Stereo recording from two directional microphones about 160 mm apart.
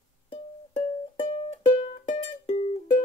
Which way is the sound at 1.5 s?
35° left (ahead or behind).